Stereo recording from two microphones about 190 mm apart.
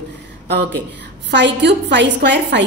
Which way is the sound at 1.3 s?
65° right (ahead or behind).